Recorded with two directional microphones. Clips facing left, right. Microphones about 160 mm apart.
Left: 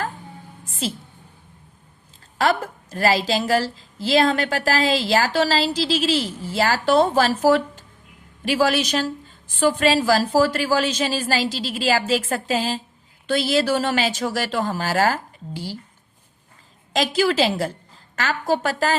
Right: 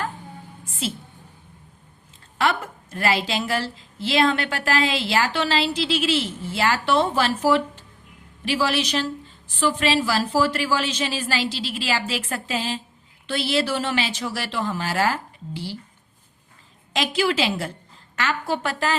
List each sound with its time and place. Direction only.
2.4 s a woman's voice: 35° left (ahead or behind)
16.9 s a woman's voice: 40° left (ahead or behind)